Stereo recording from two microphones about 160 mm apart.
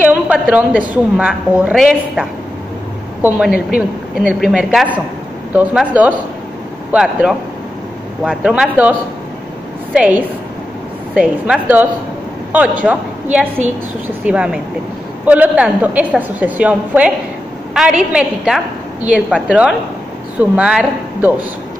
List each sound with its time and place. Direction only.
0.0 s a woman's voice: 10° right (ahead or behind)
9.9 s a woman's voice: 10° right (ahead or behind)